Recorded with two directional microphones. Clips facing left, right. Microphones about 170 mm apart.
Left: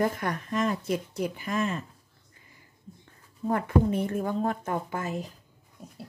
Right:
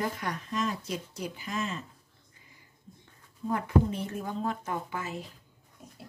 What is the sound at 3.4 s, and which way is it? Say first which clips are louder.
Speech: left 2 dB; 55° left (ahead or behind).